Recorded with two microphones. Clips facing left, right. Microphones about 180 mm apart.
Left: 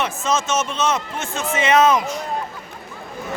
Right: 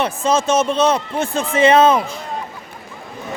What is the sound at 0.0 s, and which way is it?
A man's voice, 35° right (ahead or behind).